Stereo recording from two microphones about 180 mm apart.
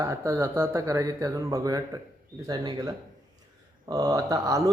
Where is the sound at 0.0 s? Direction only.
15° right (ahead or behind).